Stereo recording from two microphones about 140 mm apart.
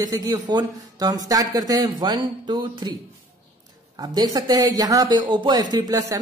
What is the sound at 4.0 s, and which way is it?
Speech, 30° right (ahead or behind).